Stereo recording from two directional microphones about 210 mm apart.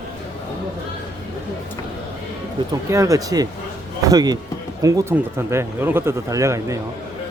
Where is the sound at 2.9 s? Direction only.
15° right (ahead or behind).